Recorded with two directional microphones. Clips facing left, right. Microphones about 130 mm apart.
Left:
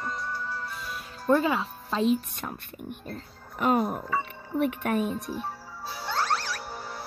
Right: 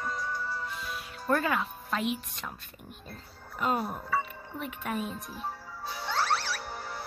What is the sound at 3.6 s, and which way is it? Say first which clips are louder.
Speech: left 6 dB; 60° left (ahead or behind).